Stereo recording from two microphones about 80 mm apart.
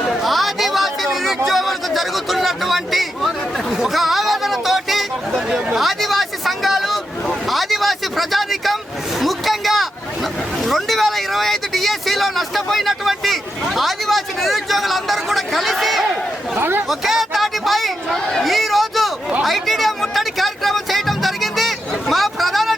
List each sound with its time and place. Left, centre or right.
0.2 s chatter: centre
1.5 s a sound: centre
10.6 s speech: centre
16.6 s chatter: right
16.9 s speech: centre
19.4 s music: centre